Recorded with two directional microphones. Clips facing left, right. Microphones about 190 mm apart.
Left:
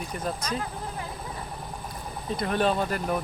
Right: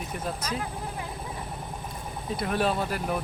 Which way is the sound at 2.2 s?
5° right (ahead or behind).